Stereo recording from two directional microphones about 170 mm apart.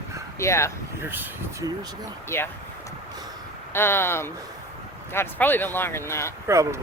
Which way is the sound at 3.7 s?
15° left (ahead or behind).